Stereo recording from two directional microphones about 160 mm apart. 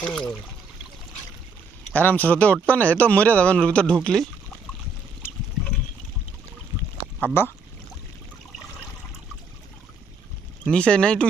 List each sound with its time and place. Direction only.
0.0 s speech: 5° left (ahead or behind)
1.9 s a man's voice: 10° left (ahead or behind)
7.4 s a man's voice: 15° left (ahead or behind)
10.7 s speech: 5° left (ahead or behind)